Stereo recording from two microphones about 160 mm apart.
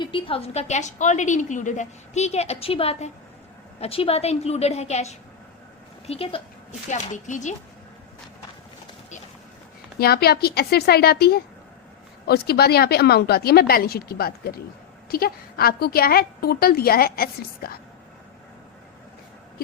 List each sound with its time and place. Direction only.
0.0 s a woman's voice: 35° left (ahead or behind)
6.9 s a woman's voice: 50° left (ahead or behind)
10.0 s a woman's voice: 80° left